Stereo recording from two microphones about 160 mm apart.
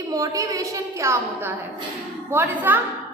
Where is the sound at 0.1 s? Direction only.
20° right (ahead or behind).